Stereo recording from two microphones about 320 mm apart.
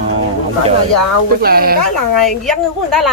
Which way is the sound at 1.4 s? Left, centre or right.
Right.